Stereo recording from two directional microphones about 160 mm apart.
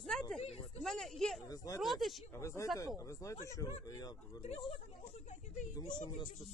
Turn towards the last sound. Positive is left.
turn(degrees=25)  # may be behind; listen again after turning